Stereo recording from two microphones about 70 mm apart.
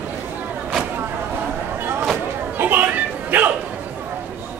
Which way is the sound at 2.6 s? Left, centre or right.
Right.